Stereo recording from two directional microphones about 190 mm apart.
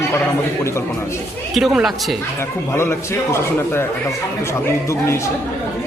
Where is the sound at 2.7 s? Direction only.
15° left (ahead or behind).